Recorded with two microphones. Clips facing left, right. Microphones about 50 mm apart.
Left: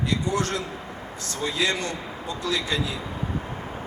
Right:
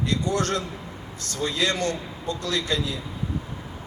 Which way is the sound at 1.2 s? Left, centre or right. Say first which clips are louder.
Right 2 dB; left.